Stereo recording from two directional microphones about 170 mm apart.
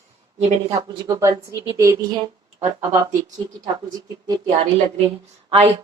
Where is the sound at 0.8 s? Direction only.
20° right (ahead or behind).